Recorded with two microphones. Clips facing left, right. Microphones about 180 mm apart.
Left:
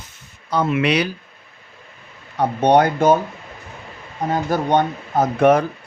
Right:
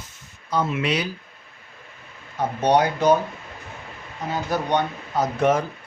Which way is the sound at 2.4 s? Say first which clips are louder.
Left 4 dB; 60° left (ahead or behind).